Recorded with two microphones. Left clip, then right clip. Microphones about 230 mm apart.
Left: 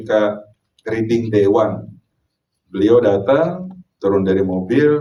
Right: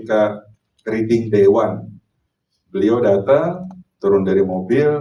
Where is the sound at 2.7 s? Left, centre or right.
Left.